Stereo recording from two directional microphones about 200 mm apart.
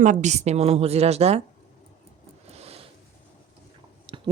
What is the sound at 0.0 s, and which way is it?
Speech, 40° right (ahead or behind).